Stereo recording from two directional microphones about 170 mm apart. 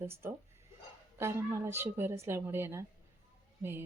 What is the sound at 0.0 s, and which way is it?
Speech, 15° right (ahead or behind).